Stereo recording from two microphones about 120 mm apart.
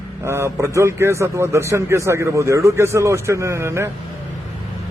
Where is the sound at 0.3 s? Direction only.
20° right (ahead or behind).